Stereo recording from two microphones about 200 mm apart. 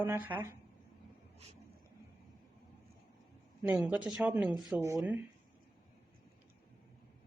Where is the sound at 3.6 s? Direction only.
5° right (ahead or behind).